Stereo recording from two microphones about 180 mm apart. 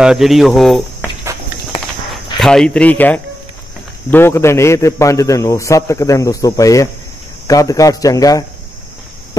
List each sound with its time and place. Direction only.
0.0 s speech: centre (ahead or behind)
2.3 s a man's voice: 5° left (ahead or behind); by 8.5 s 20° left (ahead or behind)